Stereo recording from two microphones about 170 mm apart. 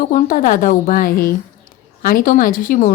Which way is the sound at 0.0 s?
55° left (ahead or behind).